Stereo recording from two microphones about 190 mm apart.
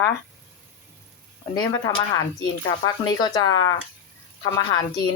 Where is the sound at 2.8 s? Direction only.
20° left (ahead or behind).